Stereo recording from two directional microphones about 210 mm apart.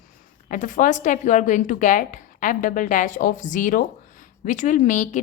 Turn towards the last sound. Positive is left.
turn(degrees=35)  # may be behind; listen again after turning